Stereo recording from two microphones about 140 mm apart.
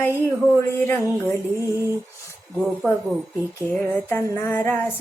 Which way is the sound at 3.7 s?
10° left (ahead or behind).